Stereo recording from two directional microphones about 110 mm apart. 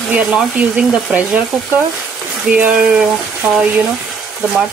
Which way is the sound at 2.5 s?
10° right (ahead or behind).